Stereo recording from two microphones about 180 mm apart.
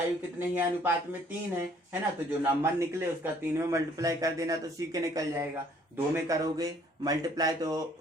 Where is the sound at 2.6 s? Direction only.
15° right (ahead or behind).